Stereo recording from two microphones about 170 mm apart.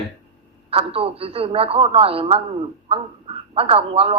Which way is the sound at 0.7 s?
35° right (ahead or behind).